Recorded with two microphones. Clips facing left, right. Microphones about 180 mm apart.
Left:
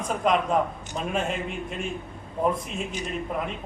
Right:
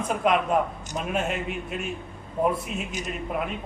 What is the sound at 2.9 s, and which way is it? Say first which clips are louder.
Speech: even; 40° right (ahead or behind).